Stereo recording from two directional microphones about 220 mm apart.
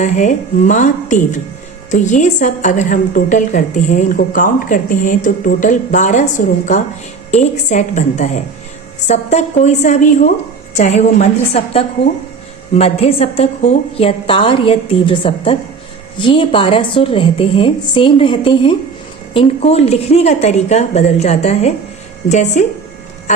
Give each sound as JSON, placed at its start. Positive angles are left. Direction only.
{"t": 0.0, "sound": "a woman's voice", "side_deg": 35}